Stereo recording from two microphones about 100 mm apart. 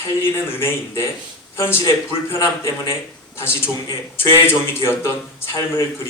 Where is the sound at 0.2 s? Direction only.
25° left (ahead or behind).